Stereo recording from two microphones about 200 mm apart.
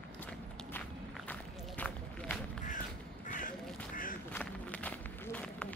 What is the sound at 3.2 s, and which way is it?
Crow, 40° left (ahead or behind).